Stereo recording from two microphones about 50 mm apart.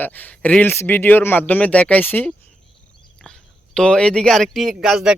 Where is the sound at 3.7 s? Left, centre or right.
Centre.